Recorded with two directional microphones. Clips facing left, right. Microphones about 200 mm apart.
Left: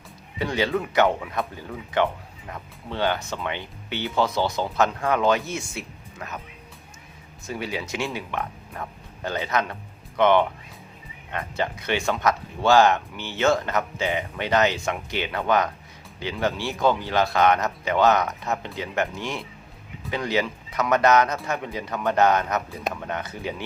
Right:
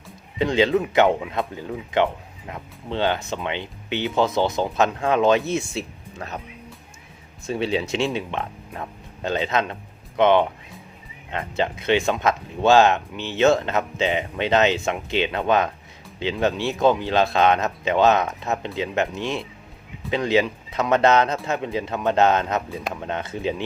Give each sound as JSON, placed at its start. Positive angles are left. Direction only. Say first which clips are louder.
{"t": 0.3, "sound": "speech", "louder": "right 5 dB", "side_deg": -20}
{"t": 7.4, "sound": "speech", "louder": "right 7 dB", "side_deg": -25}